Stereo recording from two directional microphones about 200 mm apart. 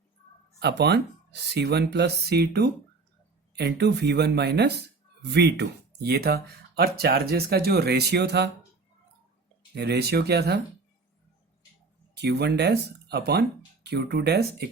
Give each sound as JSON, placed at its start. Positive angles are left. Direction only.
{"t": 0.6, "sound": "speech", "side_deg": -55}
{"t": 9.7, "sound": "speech", "side_deg": -55}
{"t": 12.1, "sound": "speech", "side_deg": -55}